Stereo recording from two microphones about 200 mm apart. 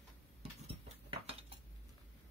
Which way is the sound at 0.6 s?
30° right (ahead or behind).